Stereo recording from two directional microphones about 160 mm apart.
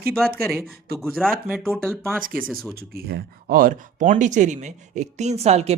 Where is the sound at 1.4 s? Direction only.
10° right (ahead or behind).